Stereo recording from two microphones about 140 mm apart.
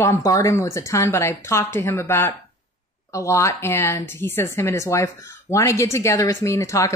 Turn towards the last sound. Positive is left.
turn(degrees=20)  # may be behind; listen again after turning